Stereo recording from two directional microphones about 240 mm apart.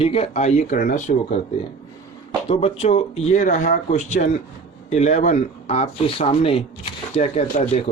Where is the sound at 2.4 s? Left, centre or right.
Left.